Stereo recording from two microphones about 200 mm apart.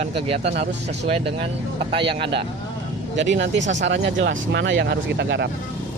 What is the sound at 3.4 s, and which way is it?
Speech, 65° right (ahead or behind).